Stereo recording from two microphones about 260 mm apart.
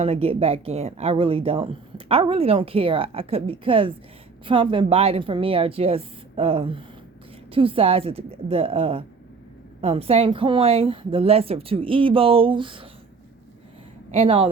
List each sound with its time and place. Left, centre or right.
0.0 s speech: right
14.1 s speech: right